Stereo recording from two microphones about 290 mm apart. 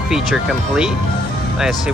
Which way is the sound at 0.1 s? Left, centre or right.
Centre.